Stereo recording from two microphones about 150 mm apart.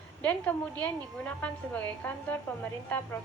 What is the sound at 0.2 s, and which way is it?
Speech, 10° left (ahead or behind).